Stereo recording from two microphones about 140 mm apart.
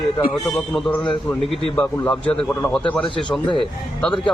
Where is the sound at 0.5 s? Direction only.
10° left (ahead or behind).